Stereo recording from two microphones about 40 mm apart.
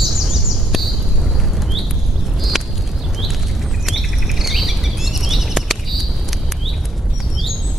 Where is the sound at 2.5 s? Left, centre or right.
Centre.